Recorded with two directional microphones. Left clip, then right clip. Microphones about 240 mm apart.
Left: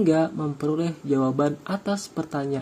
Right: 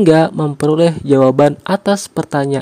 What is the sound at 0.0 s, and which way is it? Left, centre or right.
Speech, right.